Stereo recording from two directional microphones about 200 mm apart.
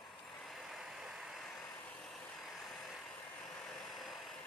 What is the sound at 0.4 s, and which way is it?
Vehicle, centre (ahead or behind).